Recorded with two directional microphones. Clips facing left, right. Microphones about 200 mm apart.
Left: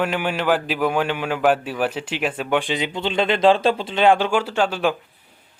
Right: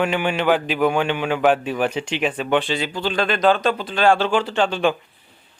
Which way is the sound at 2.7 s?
20° left (ahead or behind).